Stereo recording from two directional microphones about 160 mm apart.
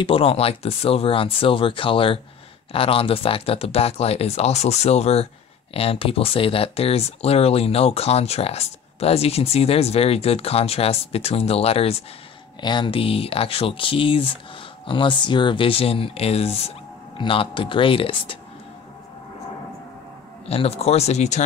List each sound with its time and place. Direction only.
0.0 s speech: 35° left (ahead or behind)
20.4 s speech: 40° left (ahead or behind)